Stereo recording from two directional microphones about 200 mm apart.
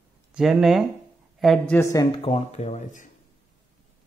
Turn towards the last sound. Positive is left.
turn(degrees=35)  # may be behind; listen again after turning